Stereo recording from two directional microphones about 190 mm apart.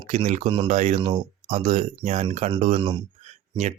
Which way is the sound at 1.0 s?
25° right (ahead or behind).